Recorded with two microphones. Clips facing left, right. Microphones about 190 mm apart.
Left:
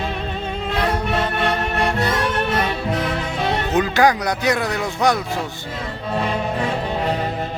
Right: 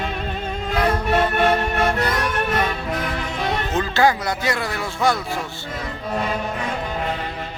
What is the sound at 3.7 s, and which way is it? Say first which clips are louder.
Speech: left 2 dB; 15° left (ahead or behind).